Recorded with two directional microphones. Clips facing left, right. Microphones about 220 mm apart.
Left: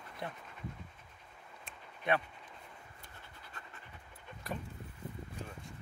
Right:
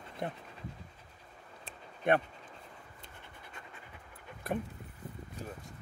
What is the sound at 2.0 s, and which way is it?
Speech, 50° right (ahead or behind).